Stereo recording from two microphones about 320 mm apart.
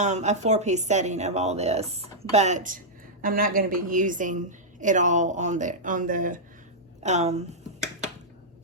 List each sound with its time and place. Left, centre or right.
0.0 s speech: right